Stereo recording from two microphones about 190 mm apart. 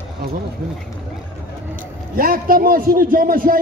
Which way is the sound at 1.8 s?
50° right (ahead or behind).